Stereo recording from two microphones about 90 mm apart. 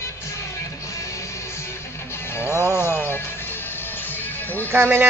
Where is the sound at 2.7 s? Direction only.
25° left (ahead or behind).